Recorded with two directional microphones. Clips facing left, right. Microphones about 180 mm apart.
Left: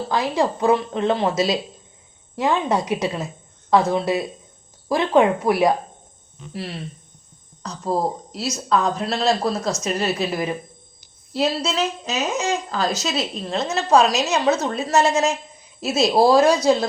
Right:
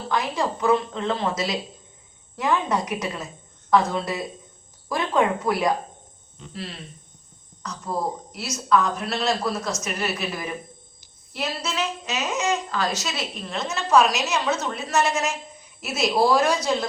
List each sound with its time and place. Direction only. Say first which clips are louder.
0.1 s speech: left 3 dB; 30° left (ahead or behind)
7.6 s speech: left 5 dB; 30° left (ahead or behind)